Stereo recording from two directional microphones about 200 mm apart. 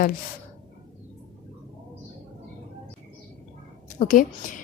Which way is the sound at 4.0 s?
40° left (ahead or behind).